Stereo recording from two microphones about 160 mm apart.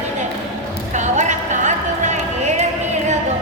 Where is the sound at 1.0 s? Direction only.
50° right (ahead or behind).